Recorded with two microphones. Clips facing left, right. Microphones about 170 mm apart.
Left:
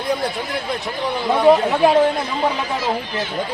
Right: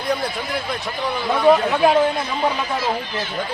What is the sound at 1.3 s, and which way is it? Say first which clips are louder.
Speech: left 2 dB; 20° left (ahead or behind).